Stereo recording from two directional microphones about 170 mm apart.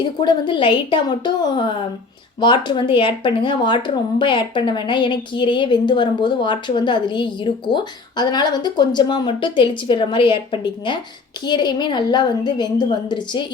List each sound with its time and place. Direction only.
0.0 s speech: 25° left (ahead or behind)